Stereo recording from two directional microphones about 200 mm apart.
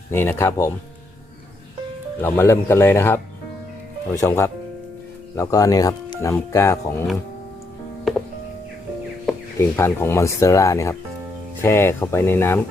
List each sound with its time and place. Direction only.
0.1 s speech: 10° left (ahead or behind)
2.2 s speech: 10° left (ahead or behind)
9.6 s speech: 10° left (ahead or behind)